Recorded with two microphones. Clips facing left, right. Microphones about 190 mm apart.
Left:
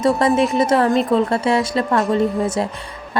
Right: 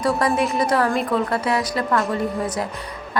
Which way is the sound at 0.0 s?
20° left (ahead or behind).